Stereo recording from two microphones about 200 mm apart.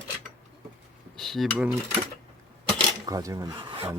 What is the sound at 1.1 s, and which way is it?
Cutlery, centre (ahead or behind).